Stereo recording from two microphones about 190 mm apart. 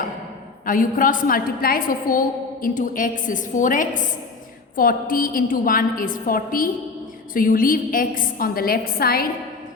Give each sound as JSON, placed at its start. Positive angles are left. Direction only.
{"t": 0.6, "sound": "a woman's voice", "side_deg": 45}